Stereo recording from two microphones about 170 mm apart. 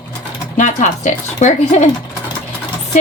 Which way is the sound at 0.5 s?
45° left (ahead or behind).